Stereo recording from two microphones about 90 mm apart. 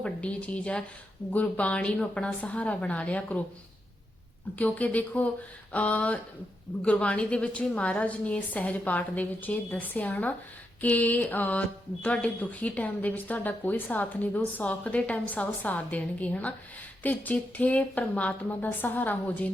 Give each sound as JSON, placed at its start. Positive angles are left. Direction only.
{"t": 0.0, "sound": "speech", "side_deg": 15}
{"t": 4.5, "sound": "speech", "side_deg": 15}